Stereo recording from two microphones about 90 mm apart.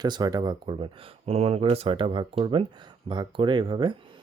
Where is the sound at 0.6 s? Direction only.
70° right (ahead or behind).